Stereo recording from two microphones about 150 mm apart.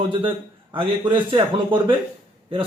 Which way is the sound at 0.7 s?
35° right (ahead or behind).